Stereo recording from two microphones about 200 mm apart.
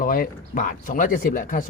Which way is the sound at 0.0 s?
45° left (ahead or behind).